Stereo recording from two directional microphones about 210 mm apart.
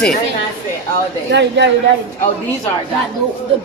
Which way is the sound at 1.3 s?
55° right (ahead or behind).